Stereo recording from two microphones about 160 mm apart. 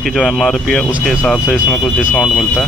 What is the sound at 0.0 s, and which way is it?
Speech, centre (ahead or behind).